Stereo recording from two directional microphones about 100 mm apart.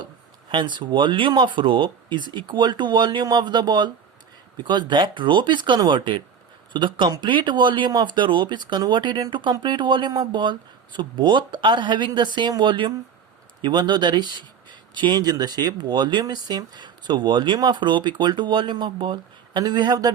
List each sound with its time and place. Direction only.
0.5 s speech: 50° right (ahead or behind)